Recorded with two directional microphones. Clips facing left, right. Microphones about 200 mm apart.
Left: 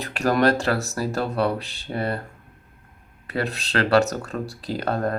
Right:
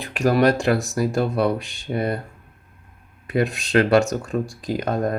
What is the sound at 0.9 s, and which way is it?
Speech, 35° left (ahead or behind).